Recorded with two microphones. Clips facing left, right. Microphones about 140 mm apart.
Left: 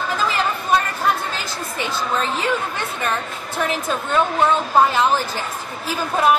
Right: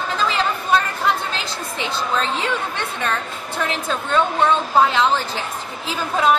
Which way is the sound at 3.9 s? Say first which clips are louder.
Right 2 dB; 10° left (ahead or behind).